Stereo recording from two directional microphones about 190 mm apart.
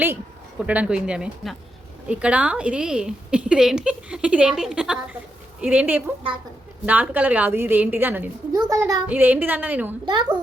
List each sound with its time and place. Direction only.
0.6 s a woman's voice: 5° right (ahead or behind)
10.1 s a child's voice: 25° right (ahead or behind)